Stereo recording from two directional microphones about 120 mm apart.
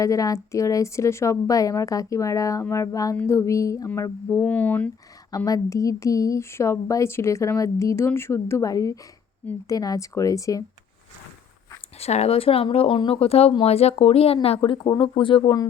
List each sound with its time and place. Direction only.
0.0 s a woman's voice: 30° left (ahead or behind)
4.4 s speech: 10° left (ahead or behind)
5.5 s a woman's voice: 25° left (ahead or behind)
11.9 s speech: 60° left (ahead or behind); by 15.6 s 40° left (ahead or behind)